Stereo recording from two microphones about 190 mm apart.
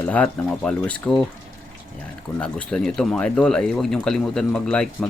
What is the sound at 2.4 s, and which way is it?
Speech, 5° left (ahead or behind).